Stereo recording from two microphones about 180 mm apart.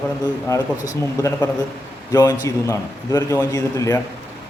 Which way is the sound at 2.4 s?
20° left (ahead or behind).